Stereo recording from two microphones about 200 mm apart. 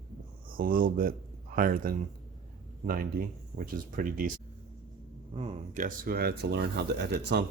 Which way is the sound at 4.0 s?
45° right (ahead or behind).